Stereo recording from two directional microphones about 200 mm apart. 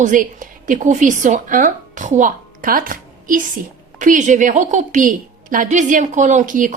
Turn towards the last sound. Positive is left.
turn(degrees=-40)  # may be behind; listen again after turning